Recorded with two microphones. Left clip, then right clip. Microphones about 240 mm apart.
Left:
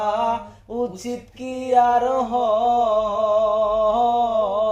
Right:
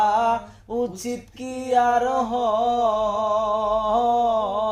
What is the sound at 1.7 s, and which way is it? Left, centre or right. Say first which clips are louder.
Mantra: left 2 dB; right.